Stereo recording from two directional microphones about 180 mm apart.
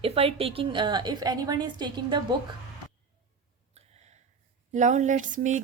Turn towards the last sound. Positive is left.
turn(degrees=-45)  # may be behind; listen again after turning